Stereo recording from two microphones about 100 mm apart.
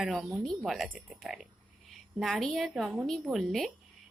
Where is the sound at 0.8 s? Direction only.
15° right (ahead or behind).